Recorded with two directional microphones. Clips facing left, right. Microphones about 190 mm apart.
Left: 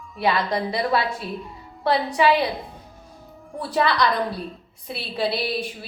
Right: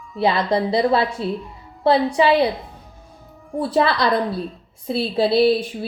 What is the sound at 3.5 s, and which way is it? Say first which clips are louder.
A woman's voice: right 3 dB; 30° right (ahead or behind).